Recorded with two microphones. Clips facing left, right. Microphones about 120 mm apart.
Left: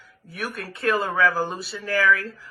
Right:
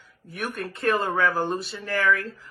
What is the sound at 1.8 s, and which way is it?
Speech, 25° right (ahead or behind).